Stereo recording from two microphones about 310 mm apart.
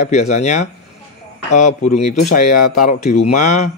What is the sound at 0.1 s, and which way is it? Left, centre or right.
Speech, left.